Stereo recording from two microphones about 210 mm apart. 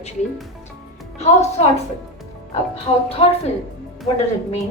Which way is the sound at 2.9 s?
30° left (ahead or behind).